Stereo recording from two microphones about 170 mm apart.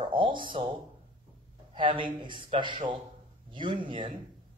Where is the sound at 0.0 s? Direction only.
30° right (ahead or behind).